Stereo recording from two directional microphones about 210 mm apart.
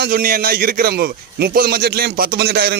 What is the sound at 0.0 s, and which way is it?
A man's voice, 45° right (ahead or behind).